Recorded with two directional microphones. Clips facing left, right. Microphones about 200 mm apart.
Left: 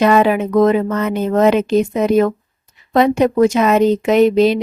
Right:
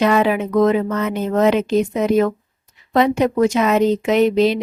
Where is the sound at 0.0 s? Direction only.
50° left (ahead or behind).